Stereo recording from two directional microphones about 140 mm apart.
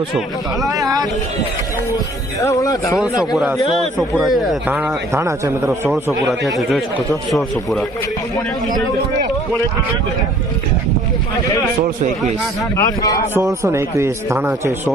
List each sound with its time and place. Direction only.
2.4 s speech: 20° left (ahead or behind)
3.3 s a man's voice: 10° right (ahead or behind)
6.6 s a man's voice: centre (ahead or behind)
12.7 s speech: 25° left (ahead or behind)
13.3 s a man's voice: 20° right (ahead or behind)